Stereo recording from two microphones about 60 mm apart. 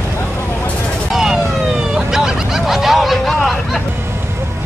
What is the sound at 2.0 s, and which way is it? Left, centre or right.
Fowl, centre.